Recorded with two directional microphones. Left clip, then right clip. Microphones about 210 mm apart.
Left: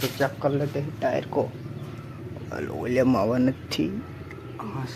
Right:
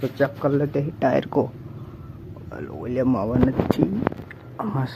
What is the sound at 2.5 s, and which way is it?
Speech, 5° left (ahead or behind).